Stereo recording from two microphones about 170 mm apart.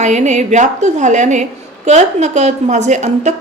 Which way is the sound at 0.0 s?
45° right (ahead or behind).